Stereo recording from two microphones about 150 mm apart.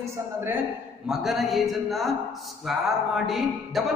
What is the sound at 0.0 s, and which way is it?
Speech, 15° right (ahead or behind).